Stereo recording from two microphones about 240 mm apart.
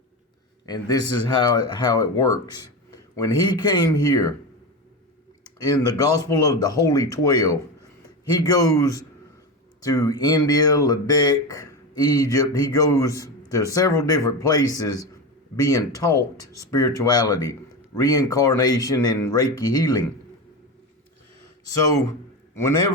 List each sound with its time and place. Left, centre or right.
0.6 s speech: centre
5.6 s speech: centre
22.5 s speech: centre